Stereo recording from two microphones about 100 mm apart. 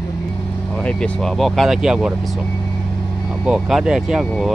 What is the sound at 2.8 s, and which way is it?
Vehicle, 10° left (ahead or behind).